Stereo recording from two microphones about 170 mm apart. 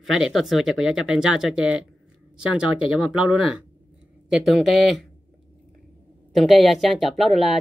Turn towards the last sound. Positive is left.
turn(degrees=0)  # may be behind; listen again after turning